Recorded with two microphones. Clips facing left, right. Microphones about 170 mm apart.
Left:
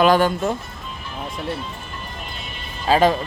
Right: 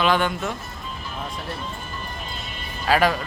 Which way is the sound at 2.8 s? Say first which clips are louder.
Left 4 dB; 25° left (ahead or behind).